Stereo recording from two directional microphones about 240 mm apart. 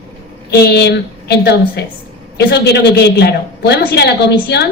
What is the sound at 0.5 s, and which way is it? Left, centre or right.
A man's voice, left.